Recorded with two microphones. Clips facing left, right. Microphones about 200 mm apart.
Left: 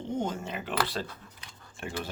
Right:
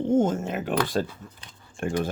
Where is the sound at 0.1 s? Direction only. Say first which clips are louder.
Right 9 dB; 50° right (ahead or behind).